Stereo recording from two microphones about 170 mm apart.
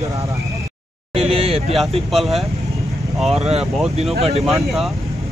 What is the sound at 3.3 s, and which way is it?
Speech, 40° right (ahead or behind).